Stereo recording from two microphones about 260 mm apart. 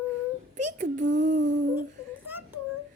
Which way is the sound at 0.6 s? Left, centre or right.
Right.